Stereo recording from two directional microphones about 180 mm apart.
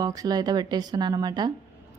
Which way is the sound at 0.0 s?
20° right (ahead or behind).